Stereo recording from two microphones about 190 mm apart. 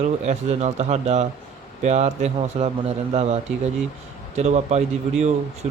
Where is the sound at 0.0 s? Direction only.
35° right (ahead or behind).